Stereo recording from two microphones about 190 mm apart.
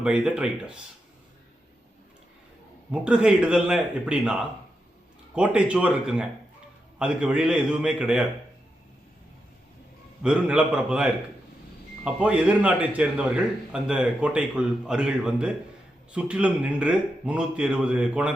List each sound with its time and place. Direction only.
0.0 s a man's voice: 5° right (ahead or behind)
2.9 s a man's voice: 5° right (ahead or behind)
10.2 s a man's voice: 5° right (ahead or behind)